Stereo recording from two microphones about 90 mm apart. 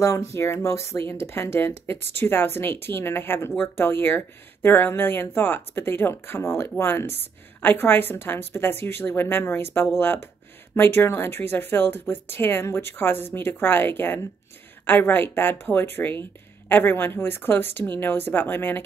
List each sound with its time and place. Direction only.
0.0 s speech: 35° left (ahead or behind)